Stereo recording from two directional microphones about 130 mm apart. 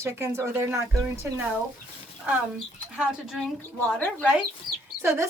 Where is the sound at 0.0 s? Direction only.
20° right (ahead or behind).